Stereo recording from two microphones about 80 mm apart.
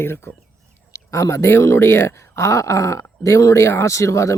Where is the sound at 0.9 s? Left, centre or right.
Left.